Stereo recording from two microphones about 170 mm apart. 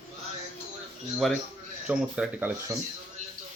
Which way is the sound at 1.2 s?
Centre (ahead or behind).